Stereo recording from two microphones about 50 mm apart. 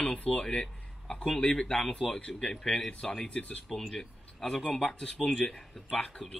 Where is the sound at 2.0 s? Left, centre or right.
Centre.